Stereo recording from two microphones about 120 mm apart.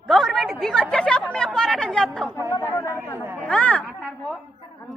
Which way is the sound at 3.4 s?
10° left (ahead or behind).